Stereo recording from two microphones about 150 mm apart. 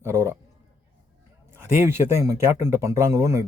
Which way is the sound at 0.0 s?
20° right (ahead or behind).